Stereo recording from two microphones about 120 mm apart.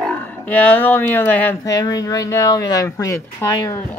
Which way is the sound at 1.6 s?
30° left (ahead or behind).